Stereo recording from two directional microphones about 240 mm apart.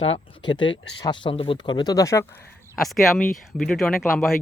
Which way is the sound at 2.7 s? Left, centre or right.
Centre.